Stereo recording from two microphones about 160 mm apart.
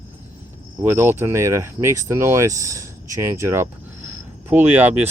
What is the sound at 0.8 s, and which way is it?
Speech, 15° right (ahead or behind).